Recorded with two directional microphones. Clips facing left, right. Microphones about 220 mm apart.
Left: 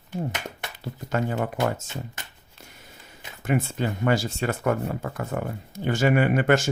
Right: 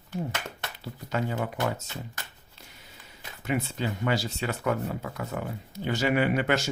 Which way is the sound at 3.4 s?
50° left (ahead or behind).